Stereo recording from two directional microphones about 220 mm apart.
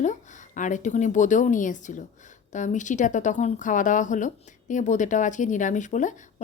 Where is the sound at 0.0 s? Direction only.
35° left (ahead or behind).